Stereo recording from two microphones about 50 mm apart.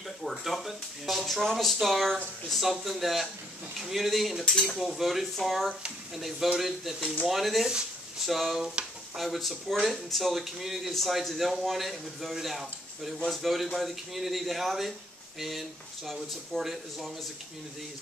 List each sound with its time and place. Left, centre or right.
0.2 s speech: centre
8.8 s speech: centre
9.1 s speech: centre